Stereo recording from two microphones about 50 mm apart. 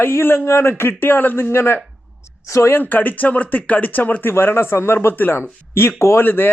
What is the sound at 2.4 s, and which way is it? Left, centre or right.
Speech, left.